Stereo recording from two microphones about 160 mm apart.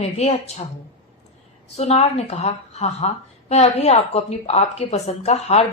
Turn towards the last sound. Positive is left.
turn(degrees=40)  # may be behind; listen again after turning